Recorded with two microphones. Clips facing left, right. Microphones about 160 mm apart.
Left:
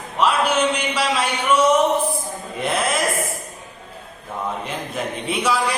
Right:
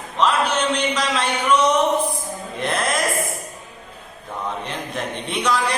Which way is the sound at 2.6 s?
5° left (ahead or behind).